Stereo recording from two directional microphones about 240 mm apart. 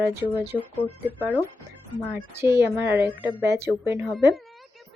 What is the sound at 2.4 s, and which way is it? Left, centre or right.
A woman's voice, centre.